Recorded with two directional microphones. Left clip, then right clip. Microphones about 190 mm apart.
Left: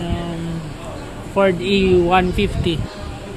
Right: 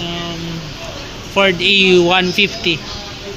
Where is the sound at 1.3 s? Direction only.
Centre (ahead or behind).